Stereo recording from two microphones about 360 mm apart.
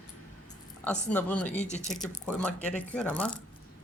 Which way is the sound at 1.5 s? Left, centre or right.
Centre.